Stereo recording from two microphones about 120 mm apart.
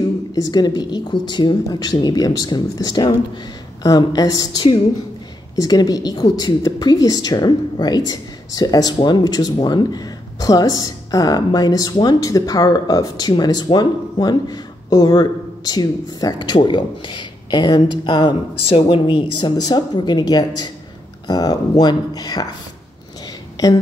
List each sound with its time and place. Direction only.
0.3 s a woman's voice: 35° left (ahead or behind)
5.6 s a woman's voice: 35° left (ahead or behind)